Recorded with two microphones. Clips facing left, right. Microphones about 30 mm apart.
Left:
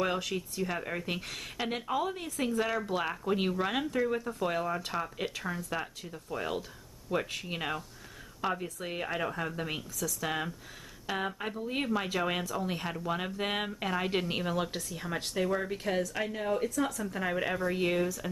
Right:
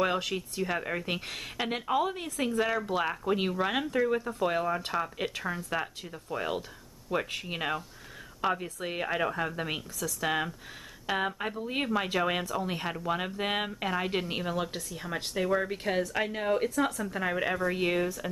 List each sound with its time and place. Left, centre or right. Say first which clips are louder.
0.3 s speech: right 2 dB; centre
2.4 s speech: right 2 dB; centre; by 16.7 s right
17.0 s speech: right 2 dB; centre